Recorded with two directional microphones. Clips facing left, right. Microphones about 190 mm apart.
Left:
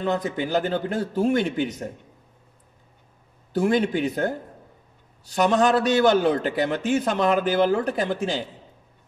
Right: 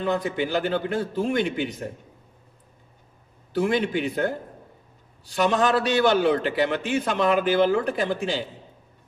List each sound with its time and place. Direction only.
0.2 s a man's voice: 45° left (ahead or behind)
3.5 s a man's voice: 45° left (ahead or behind)
5.3 s a man's voice: 45° left (ahead or behind)